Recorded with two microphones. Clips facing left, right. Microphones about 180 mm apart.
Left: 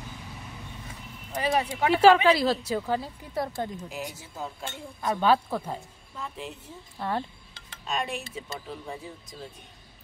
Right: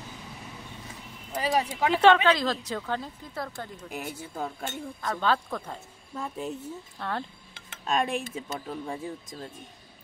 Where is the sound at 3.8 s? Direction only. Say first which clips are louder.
Even; 60° right (ahead or behind).